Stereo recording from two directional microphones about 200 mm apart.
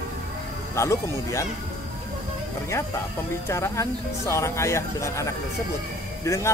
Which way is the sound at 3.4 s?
15° left (ahead or behind).